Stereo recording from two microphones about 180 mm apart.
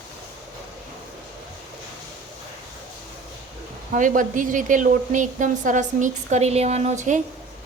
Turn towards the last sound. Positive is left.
turn(degrees=-40)  # may be behind; listen again after turning